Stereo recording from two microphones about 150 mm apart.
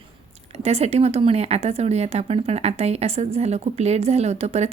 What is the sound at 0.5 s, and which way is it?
Speech, 45° right (ahead or behind).